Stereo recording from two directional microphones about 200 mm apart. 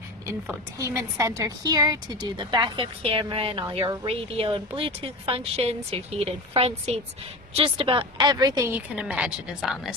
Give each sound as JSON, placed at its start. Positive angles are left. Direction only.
{"t": 0.7, "sound": "a woman's voice", "side_deg": -15}